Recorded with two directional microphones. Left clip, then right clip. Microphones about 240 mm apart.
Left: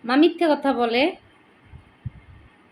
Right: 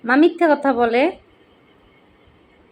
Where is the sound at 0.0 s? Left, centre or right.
Centre.